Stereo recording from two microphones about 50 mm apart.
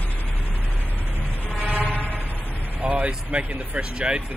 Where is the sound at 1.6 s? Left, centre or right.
Right.